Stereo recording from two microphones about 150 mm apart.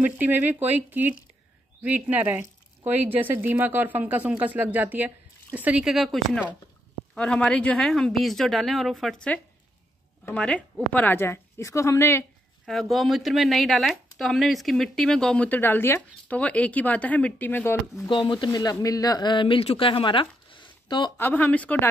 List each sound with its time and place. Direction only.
0.0 s a woman's voice: 10° right (ahead or behind); by 12.3 s 15° left (ahead or behind)
12.6 s speech: centre (ahead or behind)
18.0 s speech: 35° left (ahead or behind)
21.2 s a woman's voice: 10° left (ahead or behind)